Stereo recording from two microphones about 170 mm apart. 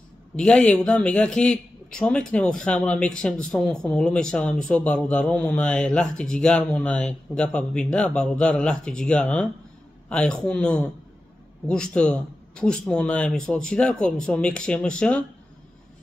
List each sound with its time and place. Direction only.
0.4 s speech: 5° left (ahead or behind)